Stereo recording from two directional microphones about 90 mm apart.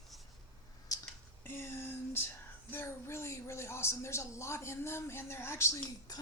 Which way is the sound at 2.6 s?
25° left (ahead or behind).